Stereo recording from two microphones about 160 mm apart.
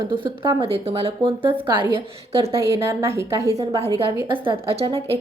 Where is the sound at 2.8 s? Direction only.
15° right (ahead or behind).